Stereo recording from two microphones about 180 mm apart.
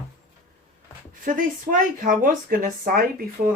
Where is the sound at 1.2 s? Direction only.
50° right (ahead or behind).